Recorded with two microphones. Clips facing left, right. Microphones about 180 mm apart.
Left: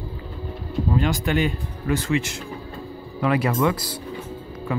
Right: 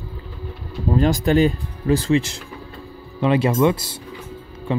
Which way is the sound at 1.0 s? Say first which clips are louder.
Right 8 dB; 35° right (ahead or behind).